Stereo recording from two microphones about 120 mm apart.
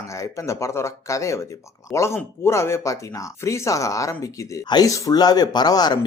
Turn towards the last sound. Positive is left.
turn(degrees=35)  # may be behind; listen again after turning